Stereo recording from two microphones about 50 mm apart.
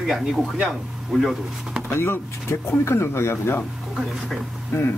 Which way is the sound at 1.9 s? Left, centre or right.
Left.